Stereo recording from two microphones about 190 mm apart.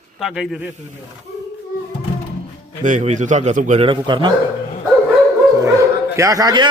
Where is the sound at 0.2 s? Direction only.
Centre (ahead or behind).